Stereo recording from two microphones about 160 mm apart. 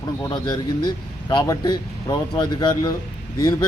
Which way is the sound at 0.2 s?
25° left (ahead or behind).